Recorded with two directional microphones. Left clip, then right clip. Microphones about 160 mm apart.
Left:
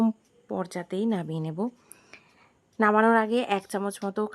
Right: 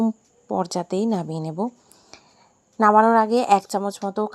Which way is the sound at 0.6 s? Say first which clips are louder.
Right 6 dB; 20° right (ahead or behind).